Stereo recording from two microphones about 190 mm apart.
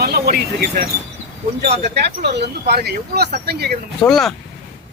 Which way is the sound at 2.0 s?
65° right (ahead or behind).